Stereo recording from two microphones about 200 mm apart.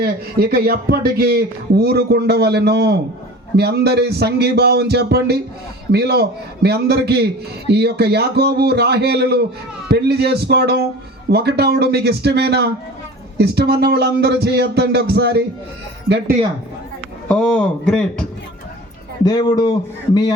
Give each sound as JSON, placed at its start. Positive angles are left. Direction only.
{"t": 0.0, "sound": "speech", "side_deg": -50}
{"t": 17.2, "sound": "speech", "side_deg": 5}
{"t": 19.2, "sound": "speech", "side_deg": 20}